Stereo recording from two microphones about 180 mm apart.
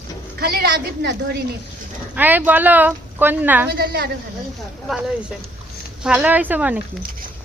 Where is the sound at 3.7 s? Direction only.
65° right (ahead or behind).